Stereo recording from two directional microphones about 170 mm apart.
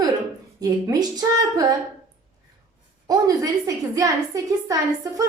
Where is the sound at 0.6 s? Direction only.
20° right (ahead or behind).